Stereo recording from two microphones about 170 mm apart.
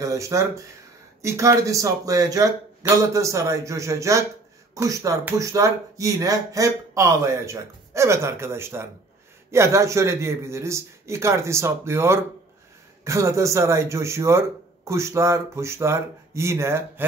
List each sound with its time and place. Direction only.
0.0 s speech: 20° right (ahead or behind)